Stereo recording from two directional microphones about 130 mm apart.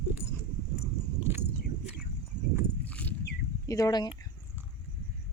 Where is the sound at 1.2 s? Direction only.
15° right (ahead or behind).